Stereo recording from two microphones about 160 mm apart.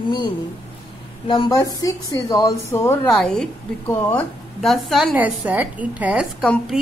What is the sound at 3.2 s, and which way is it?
A woman's voice, 5° left (ahead or behind).